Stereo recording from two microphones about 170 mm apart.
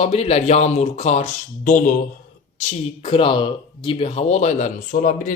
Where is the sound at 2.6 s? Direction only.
40° left (ahead or behind).